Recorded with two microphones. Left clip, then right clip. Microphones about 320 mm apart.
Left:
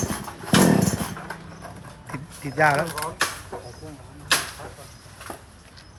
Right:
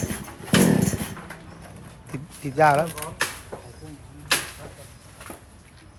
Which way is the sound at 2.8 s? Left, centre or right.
Centre.